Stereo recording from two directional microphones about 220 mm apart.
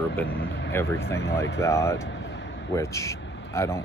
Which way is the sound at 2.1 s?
55° left (ahead or behind).